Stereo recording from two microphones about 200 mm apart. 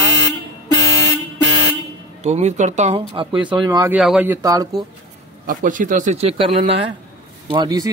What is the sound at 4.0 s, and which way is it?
Speech, 5° right (ahead or behind).